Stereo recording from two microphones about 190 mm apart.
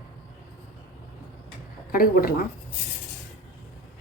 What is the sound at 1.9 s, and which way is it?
Speech, 50° left (ahead or behind).